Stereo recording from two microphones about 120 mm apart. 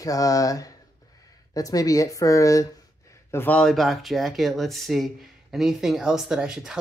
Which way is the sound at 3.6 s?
Centre (ahead or behind).